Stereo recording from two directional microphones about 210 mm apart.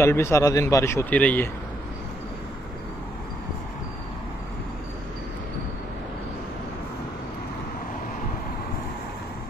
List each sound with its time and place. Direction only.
0.0 s speech: 10° left (ahead or behind)